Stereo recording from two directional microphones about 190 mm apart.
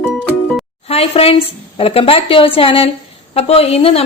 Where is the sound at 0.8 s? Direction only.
30° left (ahead or behind).